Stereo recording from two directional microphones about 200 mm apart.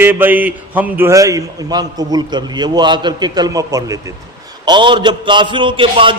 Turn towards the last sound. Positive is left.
turn(degrees=-25)  # may be behind; listen again after turning